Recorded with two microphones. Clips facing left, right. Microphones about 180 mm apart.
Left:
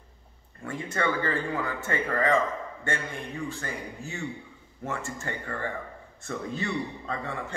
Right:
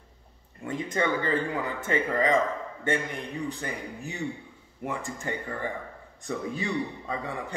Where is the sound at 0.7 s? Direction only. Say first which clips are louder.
Right 2 dB; 15° right (ahead or behind).